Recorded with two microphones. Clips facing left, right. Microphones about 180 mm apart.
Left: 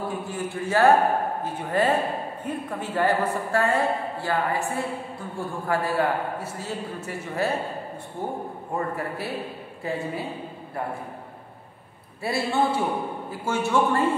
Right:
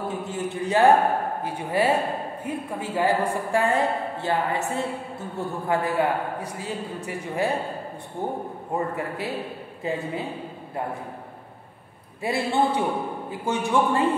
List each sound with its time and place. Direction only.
0.1 s a sound: 20° right (ahead or behind)
1.4 s a woman's voice: 10° right (ahead or behind)
8.7 s a woman's voice: 15° right (ahead or behind)
12.2 s a woman's voice: 15° right (ahead or behind)